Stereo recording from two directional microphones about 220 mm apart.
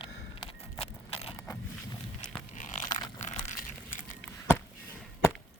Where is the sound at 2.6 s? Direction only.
35° left (ahead or behind).